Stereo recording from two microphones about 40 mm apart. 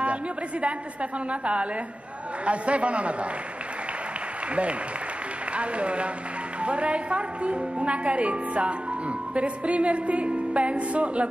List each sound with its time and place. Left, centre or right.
0.0 s a woman's voice: right
5.6 s a woman's voice: right